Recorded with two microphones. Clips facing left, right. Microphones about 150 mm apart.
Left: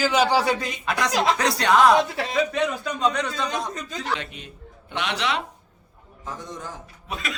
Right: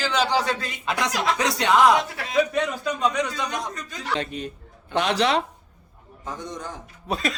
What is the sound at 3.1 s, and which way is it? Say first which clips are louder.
Speech: even; 10° right (ahead or behind).